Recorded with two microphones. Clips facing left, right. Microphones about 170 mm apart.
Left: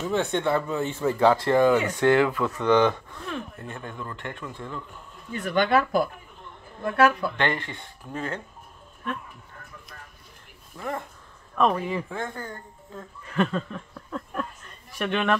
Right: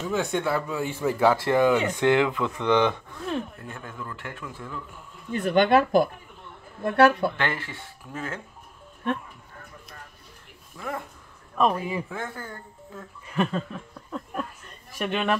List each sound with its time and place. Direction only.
0.1 s speech: 5° right (ahead or behind)
3.6 s a man's voice: centre (ahead or behind)
5.3 s speech: 30° right (ahead or behind)
7.3 s a man's voice: 5° right (ahead or behind)
11.5 s speech: 5° right (ahead or behind)